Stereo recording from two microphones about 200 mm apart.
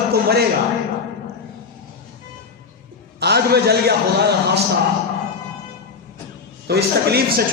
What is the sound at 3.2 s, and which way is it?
Speech, 55° right (ahead or behind).